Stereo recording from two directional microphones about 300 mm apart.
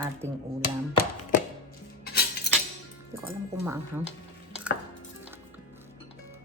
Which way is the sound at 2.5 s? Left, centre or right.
Left.